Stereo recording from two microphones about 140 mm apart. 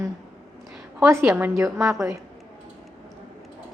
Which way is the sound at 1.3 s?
15° right (ahead or behind).